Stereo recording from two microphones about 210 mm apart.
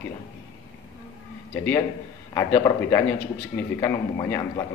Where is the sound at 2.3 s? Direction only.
15° left (ahead or behind).